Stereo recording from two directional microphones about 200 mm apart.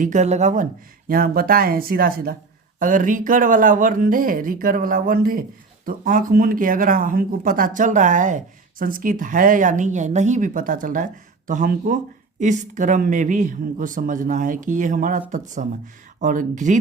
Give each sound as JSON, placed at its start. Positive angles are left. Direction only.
{"t": 0.0, "sound": "speech", "side_deg": -35}
{"t": 16.2, "sound": "speech", "side_deg": -40}